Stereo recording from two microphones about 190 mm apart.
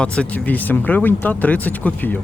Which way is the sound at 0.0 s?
5° left (ahead or behind).